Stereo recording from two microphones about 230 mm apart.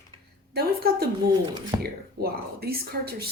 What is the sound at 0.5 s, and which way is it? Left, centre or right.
A woman's voice, right.